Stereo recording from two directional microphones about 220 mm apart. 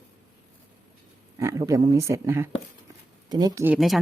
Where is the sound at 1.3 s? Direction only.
15° right (ahead or behind).